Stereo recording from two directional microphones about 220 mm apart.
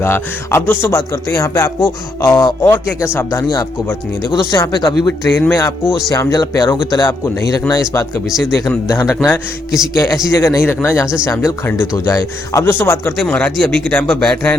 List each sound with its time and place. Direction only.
0.0 s speech: 10° left (ahead or behind)
9.7 s a man's voice: centre (ahead or behind)
10.3 s speech: 15° left (ahead or behind)